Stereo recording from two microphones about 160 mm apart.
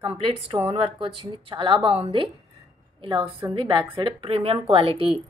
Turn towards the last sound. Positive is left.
turn(degrees=-35)  # may be behind; listen again after turning